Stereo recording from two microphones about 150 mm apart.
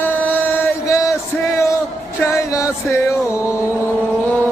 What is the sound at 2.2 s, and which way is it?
Music, 20° left (ahead or behind).